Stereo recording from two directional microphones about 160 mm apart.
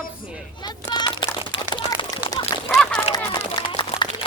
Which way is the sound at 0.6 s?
25° left (ahead or behind).